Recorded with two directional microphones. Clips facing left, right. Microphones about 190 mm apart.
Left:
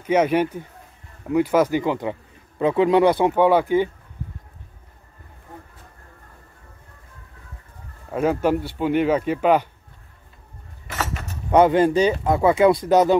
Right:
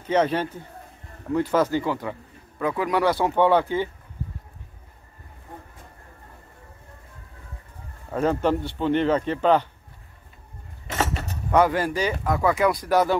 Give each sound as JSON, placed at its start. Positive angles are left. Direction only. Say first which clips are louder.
{"t": 0.0, "sound": "speech", "louder": "left 4 dB", "side_deg": 10}
{"t": 8.1, "sound": "speech", "louder": "left 2 dB", "side_deg": 10}
{"t": 10.9, "sound": "a sound", "louder": "right 2 dB", "side_deg": -25}
{"t": 11.5, "sound": "speech", "louder": "left 5 dB", "side_deg": 20}